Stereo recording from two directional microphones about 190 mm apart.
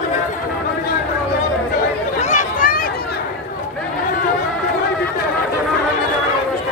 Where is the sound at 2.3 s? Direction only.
45° left (ahead or behind).